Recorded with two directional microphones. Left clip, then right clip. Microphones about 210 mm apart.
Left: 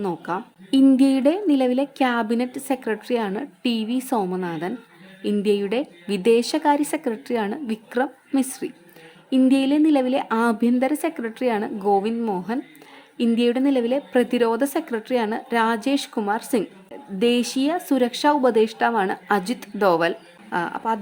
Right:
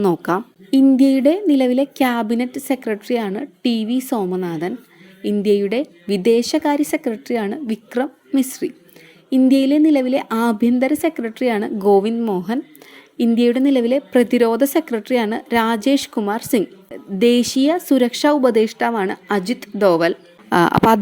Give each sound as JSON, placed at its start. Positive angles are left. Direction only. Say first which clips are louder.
{"t": 0.0, "sound": "speech", "louder": "right 8 dB", "side_deg": -30}
{"t": 0.9, "sound": "a woman's voice", "louder": "right 4 dB", "side_deg": -10}
{"t": 20.5, "sound": "a woman's voice", "louder": "right 11 dB", "side_deg": -45}